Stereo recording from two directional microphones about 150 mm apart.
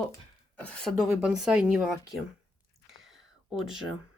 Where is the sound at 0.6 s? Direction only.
5° left (ahead or behind).